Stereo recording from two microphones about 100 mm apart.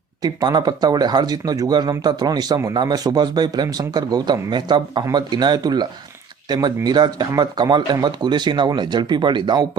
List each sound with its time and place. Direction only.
0.2 s speech: 40° right (ahead or behind)